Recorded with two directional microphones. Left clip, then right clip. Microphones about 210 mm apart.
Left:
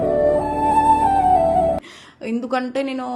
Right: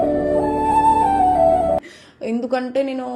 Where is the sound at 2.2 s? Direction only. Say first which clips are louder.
Right 1 dB; 10° left (ahead or behind).